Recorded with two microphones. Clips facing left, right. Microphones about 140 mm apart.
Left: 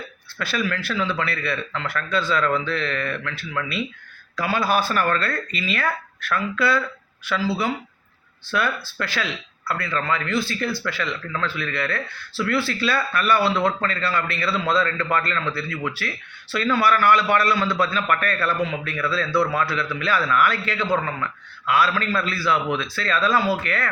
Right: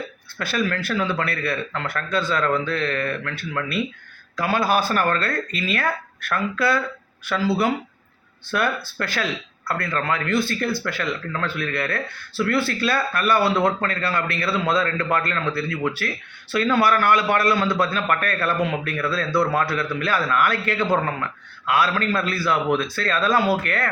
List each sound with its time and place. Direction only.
0.3 s speech: 45° right (ahead or behind)